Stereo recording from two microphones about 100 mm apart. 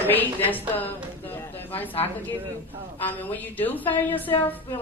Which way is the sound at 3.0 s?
20° left (ahead or behind).